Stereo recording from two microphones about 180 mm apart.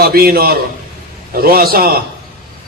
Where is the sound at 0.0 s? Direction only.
55° right (ahead or behind).